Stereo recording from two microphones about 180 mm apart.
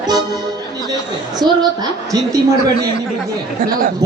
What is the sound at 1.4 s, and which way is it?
Speech, 25° right (ahead or behind).